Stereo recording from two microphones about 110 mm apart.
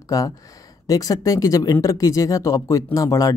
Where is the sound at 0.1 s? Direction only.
30° left (ahead or behind).